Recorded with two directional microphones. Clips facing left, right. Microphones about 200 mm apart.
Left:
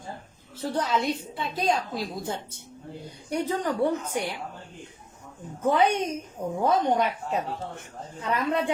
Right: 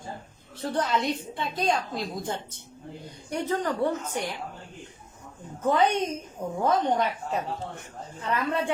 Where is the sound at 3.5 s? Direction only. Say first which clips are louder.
Even; 10° left (ahead or behind).